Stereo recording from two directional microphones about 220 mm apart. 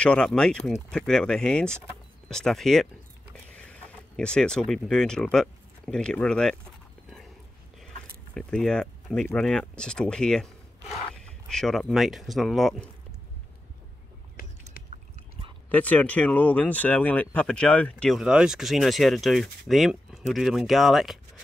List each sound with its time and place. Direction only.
0.0 s speech: 5° left (ahead or behind)
8.4 s speech: 5° left (ahead or behind)
14.4 s a sound: 40° left (ahead or behind)
15.7 s speech: 5° left (ahead or behind)